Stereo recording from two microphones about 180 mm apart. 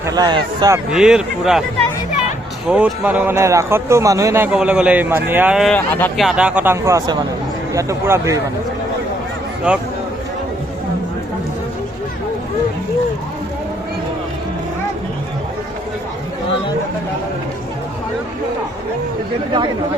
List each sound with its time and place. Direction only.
0.0 s speech: 20° right (ahead or behind)
0.9 s speech: 5° right (ahead or behind)
2.6 s a man's voice: 5° right (ahead or behind)
9.7 s speech: 5° right (ahead or behind)